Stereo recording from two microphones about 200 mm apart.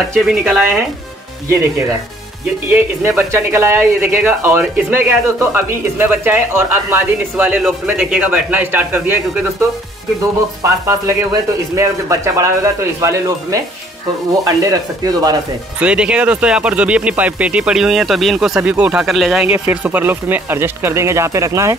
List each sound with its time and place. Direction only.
0.1 s speech: centre (ahead or behind)
2.7 s speech: 10° right (ahead or behind)
10.6 s speech: 15° right (ahead or behind)
15.8 s speech: 5° right (ahead or behind)